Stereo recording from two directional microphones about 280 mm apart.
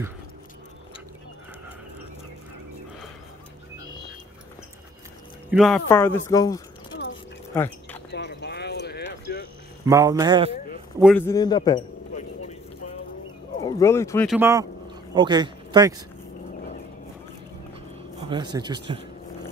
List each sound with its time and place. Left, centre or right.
5.5 s speech: centre
7.5 s a sound: centre
8.1 s clip-clop: left
9.8 s speech: centre
11.0 s a man's voice: centre
11.2 s a sound: centre
13.6 s speech: centre
14.3 s speech: centre
18.3 s speech: centre